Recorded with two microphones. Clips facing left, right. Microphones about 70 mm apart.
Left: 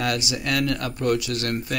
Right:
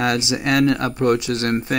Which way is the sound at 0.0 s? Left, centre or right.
Right.